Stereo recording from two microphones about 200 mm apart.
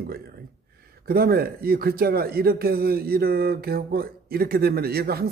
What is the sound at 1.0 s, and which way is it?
Speech, 50° right (ahead or behind).